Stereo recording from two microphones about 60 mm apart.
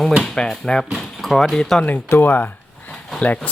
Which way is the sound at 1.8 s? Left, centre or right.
Left.